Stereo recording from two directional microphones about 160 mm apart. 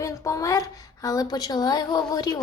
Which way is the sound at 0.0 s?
20° left (ahead or behind).